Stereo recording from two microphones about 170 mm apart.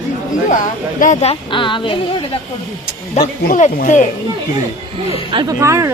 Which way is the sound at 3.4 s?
50° left (ahead or behind).